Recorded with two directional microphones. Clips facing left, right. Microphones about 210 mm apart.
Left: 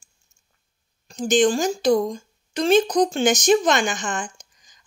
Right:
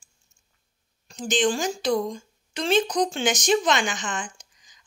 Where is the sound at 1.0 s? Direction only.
45° left (ahead or behind).